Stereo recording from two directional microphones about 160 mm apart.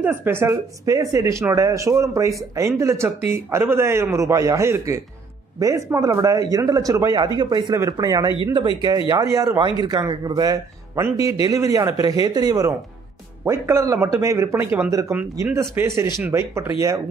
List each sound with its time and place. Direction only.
0.0 s speech: 15° right (ahead or behind)